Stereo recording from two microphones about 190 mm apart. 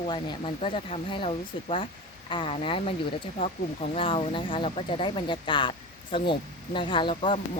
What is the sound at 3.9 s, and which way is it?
Speech, 30° left (ahead or behind).